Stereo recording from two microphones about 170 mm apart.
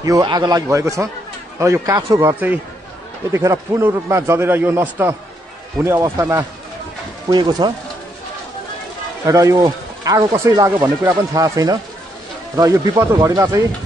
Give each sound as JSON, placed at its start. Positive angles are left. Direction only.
{"t": 0.0, "sound": "a man's voice", "side_deg": -25}
{"t": 7.2, "sound": "speech", "side_deg": -25}
{"t": 9.2, "sound": "speech", "side_deg": -20}